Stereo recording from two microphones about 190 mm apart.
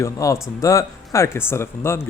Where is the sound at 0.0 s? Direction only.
15° left (ahead or behind).